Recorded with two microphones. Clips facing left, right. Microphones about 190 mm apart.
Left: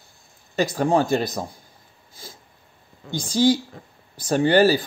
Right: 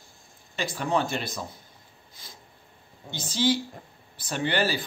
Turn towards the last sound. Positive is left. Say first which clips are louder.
# left 10 dB
turn(degrees=40)  # may be behind; listen again after turning